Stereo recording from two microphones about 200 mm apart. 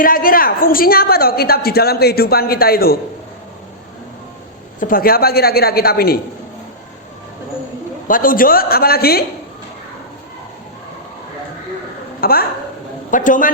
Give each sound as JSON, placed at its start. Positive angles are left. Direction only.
{"t": 0.0, "sound": "a woman's voice", "side_deg": 45}
{"t": 4.8, "sound": "a woman's voice", "side_deg": 45}
{"t": 8.0, "sound": "a woman's voice", "side_deg": 45}
{"t": 12.2, "sound": "a woman's voice", "side_deg": 50}